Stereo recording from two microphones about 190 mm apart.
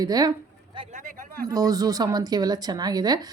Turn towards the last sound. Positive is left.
turn(degrees=-20)  # may be behind; listen again after turning